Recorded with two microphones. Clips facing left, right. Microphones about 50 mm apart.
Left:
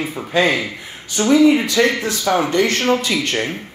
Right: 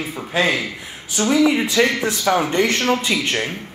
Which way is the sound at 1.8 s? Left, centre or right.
Centre.